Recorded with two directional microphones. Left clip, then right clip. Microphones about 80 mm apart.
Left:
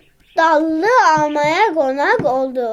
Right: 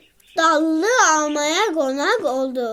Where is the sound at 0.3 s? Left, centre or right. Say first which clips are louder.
Left 3 dB; centre.